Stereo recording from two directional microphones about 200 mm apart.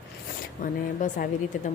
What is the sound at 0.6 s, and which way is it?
Speech, 40° left (ahead or behind).